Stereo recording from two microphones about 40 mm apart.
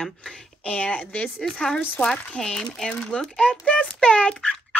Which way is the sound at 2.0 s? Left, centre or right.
Left.